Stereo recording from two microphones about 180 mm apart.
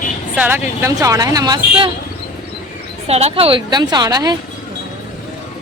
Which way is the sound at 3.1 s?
35° right (ahead or behind).